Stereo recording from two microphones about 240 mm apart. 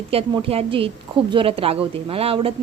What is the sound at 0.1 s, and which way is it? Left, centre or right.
Speech, right.